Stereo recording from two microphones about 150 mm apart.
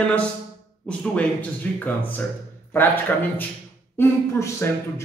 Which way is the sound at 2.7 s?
15° left (ahead or behind).